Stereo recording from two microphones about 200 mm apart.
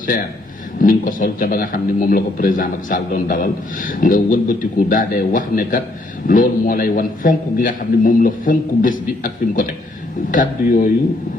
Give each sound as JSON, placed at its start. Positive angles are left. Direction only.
{"t": 0.8, "sound": "a man's voice", "side_deg": 40}